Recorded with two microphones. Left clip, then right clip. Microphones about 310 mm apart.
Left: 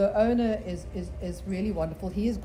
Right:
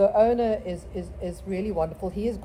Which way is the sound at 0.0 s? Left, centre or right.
Centre.